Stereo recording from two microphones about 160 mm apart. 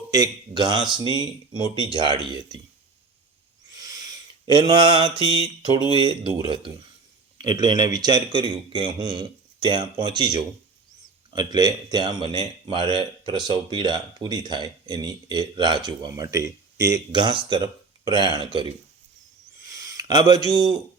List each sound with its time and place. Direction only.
0.1 s a man's voice: 25° right (ahead or behind)
3.7 s mantra: 25° right (ahead or behind)
5.9 s a man's voice: 30° right (ahead or behind)
19.6 s a sound: 20° right (ahead or behind)